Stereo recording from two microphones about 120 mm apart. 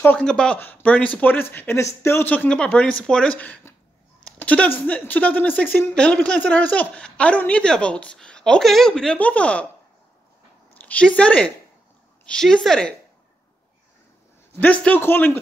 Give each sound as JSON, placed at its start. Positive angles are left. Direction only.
{"t": 0.2, "sound": "speech", "side_deg": 5}
{"t": 10.7, "sound": "a woman's voice", "side_deg": 10}
{"t": 14.5, "sound": "speech", "side_deg": 10}